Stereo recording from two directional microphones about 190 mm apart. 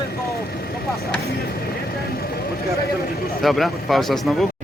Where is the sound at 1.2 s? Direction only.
55° left (ahead or behind).